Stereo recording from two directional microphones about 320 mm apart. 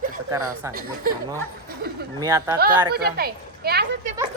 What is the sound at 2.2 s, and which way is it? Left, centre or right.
Speech, centre.